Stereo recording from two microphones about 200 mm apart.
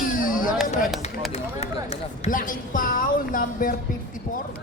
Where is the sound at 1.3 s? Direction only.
30° left (ahead or behind).